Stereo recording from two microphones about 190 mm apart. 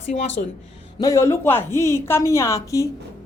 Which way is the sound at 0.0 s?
35° left (ahead or behind).